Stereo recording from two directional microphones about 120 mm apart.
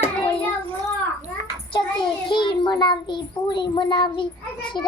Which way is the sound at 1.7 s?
40° left (ahead or behind).